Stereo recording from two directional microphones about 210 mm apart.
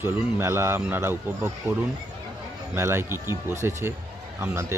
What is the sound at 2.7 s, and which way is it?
Speech, 10° right (ahead or behind).